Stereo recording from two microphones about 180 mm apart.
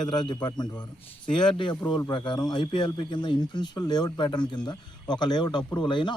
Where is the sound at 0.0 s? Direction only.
5° left (ahead or behind).